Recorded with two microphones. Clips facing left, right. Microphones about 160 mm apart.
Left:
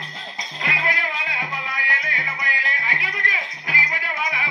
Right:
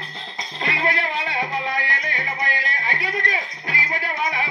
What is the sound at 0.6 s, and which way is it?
Music, 35° right (ahead or behind).